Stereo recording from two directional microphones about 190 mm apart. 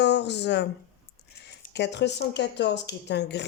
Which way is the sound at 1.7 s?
65° left (ahead or behind).